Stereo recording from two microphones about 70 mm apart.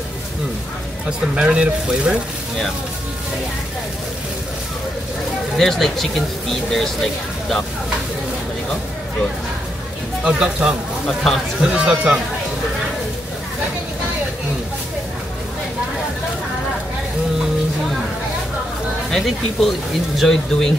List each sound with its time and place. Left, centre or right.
1.3 s speech: centre
5.6 s speech: centre
10.2 s speech: centre
19.0 s speech: centre